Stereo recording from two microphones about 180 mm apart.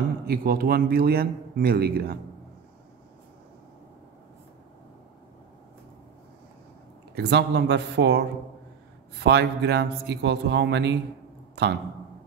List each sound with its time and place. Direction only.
0.3 s a man's voice: 55° right (ahead or behind)
7.2 s speech: 70° right (ahead or behind)